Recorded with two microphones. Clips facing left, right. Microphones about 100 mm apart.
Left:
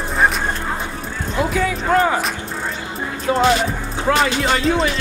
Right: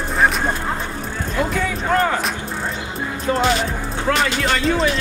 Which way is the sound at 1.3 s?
5° left (ahead or behind).